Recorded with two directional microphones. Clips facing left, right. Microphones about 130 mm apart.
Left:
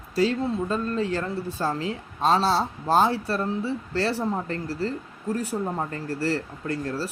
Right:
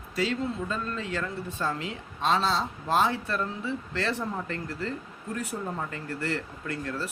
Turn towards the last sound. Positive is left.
turn(degrees=35)  # may be behind; listen again after turning